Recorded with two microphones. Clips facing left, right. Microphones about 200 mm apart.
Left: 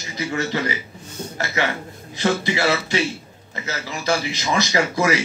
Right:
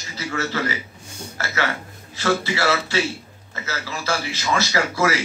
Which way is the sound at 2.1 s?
20° left (ahead or behind).